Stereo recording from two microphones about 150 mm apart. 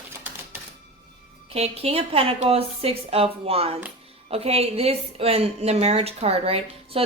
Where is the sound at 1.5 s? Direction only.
45° right (ahead or behind).